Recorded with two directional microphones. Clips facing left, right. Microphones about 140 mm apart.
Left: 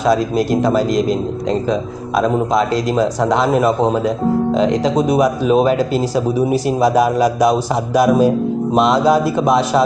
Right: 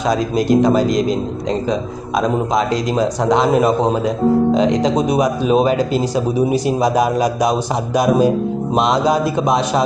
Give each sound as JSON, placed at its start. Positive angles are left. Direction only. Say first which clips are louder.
{"t": 0.1, "sound": "speech", "louder": "right 2 dB", "side_deg": -20}
{"t": 2.5, "sound": "speech", "louder": "left 1 dB", "side_deg": -15}